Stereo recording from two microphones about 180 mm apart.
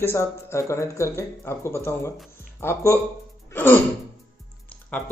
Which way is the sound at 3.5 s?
10° left (ahead or behind).